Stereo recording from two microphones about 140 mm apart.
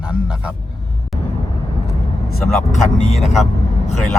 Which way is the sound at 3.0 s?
50° left (ahead or behind).